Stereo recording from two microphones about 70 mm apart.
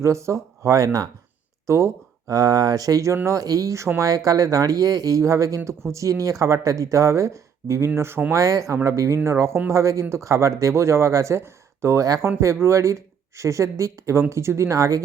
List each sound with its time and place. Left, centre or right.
0.0 s speech: right
1.6 s speech: right
7.9 s speech: right
8.3 s speech: right